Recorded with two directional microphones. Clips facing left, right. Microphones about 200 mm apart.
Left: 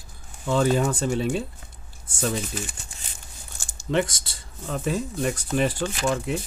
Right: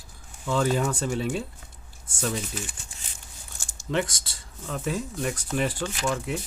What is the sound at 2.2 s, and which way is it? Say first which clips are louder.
Speech: left 3 dB; 40° left (ahead or behind).